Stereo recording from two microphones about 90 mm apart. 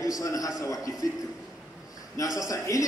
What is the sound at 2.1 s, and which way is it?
Speech, 40° left (ahead or behind).